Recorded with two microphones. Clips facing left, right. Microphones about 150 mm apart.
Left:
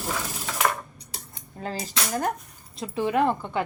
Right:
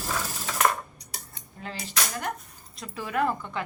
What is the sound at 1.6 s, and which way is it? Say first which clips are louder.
Speech: left 3 dB; 40° left (ahead or behind).